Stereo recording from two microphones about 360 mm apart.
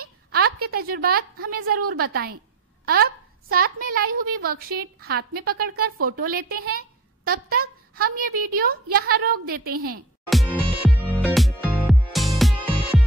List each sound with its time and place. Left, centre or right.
0.0 s a sound: right
0.6 s a woman's voice: right
2.9 s a woman's voice: right
10.3 s music: centre